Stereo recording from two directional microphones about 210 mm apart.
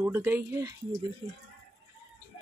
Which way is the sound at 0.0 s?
10° right (ahead or behind).